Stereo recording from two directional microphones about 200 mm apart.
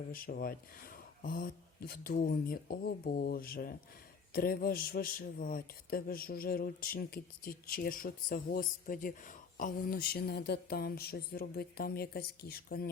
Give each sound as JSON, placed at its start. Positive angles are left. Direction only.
{"t": 0.1, "sound": "a man's voice", "side_deg": 45}